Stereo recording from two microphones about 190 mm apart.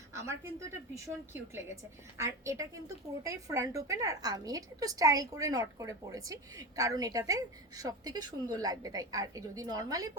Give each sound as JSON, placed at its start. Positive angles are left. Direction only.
{"t": 0.9, "sound": "a woman's voice", "side_deg": -15}